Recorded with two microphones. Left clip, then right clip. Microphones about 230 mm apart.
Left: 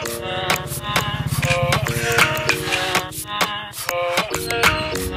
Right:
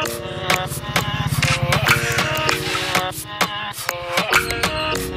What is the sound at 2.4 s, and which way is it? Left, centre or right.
Music, centre.